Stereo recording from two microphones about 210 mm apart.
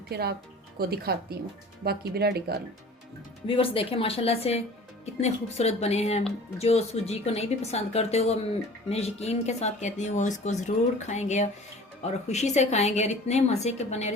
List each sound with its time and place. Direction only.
0.1 s speech: 50° right (ahead or behind)
3.4 s a woman's voice: 25° left (ahead or behind)